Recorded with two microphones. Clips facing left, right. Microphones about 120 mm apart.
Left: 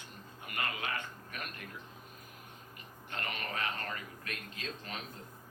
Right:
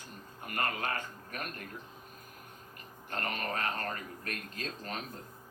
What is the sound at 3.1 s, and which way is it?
A man's voice, 40° right (ahead or behind).